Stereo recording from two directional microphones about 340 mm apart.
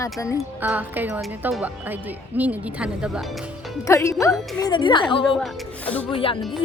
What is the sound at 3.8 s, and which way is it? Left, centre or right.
Speech, centre.